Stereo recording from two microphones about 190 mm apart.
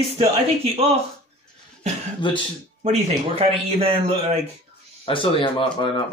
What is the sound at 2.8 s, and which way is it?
A man's voice, 30° right (ahead or behind).